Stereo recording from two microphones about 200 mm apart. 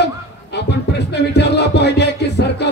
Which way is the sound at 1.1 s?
55° left (ahead or behind).